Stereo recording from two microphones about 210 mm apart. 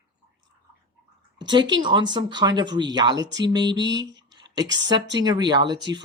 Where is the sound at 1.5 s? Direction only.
20° right (ahead or behind).